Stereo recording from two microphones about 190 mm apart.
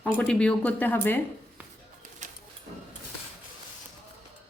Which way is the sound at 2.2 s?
40° right (ahead or behind).